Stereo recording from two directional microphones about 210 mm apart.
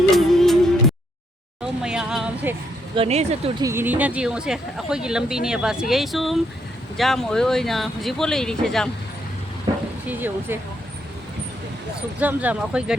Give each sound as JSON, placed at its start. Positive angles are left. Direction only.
{"t": 0.1, "sound": "music", "side_deg": 0}
{"t": 1.8, "sound": "a sound", "side_deg": -5}
{"t": 2.9, "sound": "speech", "side_deg": -30}
{"t": 3.6, "sound": "speech", "side_deg": -10}
{"t": 10.1, "sound": "speech", "side_deg": -10}
{"t": 12.2, "sound": "speech", "side_deg": -5}